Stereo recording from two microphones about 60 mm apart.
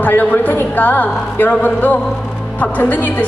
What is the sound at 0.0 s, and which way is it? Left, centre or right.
A woman's voice, left.